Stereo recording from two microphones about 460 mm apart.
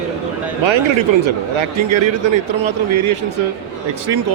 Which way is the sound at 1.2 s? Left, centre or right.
Right.